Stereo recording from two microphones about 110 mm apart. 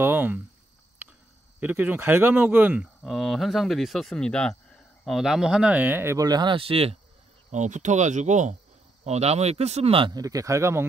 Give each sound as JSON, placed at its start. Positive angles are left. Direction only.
{"t": 0.0, "sound": "speech", "side_deg": -20}
{"t": 1.6, "sound": "speech", "side_deg": -15}
{"t": 3.0, "sound": "speech", "side_deg": 0}
{"t": 6.1, "sound": "speech", "side_deg": -35}
{"t": 6.5, "sound": "speech", "side_deg": -55}
{"t": 7.5, "sound": "speech", "side_deg": -90}
{"t": 9.0, "sound": "speech", "side_deg": -80}
{"t": 10.0, "sound": "speech", "side_deg": -35}